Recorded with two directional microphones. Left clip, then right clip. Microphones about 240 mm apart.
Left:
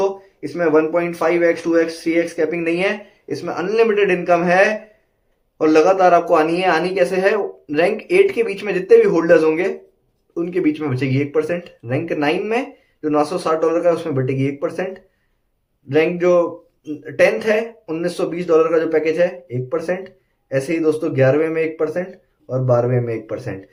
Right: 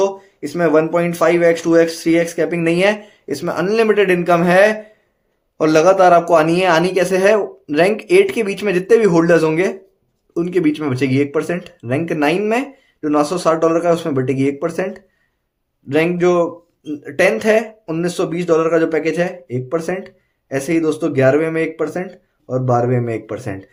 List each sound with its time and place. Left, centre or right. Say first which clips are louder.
0.0 s speech: right 2 dB; right